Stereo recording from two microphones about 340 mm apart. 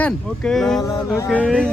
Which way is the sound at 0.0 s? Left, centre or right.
Centre.